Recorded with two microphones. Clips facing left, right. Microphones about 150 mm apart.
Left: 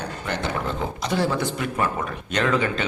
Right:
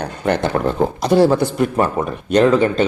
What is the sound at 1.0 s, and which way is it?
A man's voice, 45° right (ahead or behind).